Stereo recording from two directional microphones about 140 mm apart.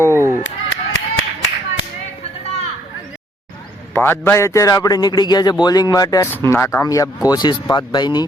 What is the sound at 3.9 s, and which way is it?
Speech, 15° left (ahead or behind).